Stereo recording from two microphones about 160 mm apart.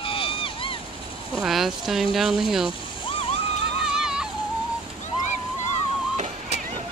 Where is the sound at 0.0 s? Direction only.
35° left (ahead or behind).